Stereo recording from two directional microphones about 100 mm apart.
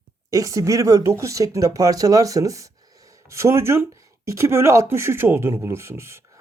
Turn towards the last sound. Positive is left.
turn(degrees=-25)  # may be behind; listen again after turning